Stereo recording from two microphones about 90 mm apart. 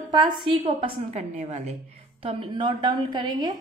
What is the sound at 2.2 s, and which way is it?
Speech, 90° right.